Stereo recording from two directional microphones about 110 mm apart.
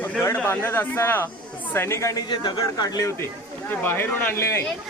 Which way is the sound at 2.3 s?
45° left (ahead or behind).